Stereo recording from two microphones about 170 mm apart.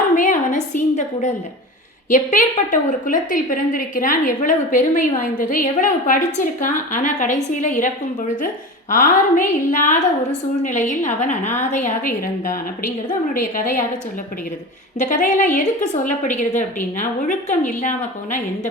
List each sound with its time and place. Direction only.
0.2 s a sound: 45° left (ahead or behind)
2.1 s a woman's voice: 45° left (ahead or behind)
8.9 s a woman's voice: 50° left (ahead or behind)
14.9 s a woman's voice: 50° left (ahead or behind)